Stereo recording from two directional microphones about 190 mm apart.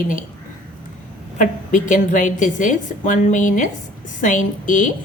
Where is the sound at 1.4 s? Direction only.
40° left (ahead or behind).